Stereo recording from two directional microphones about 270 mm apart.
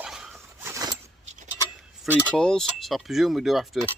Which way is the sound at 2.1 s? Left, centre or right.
Centre.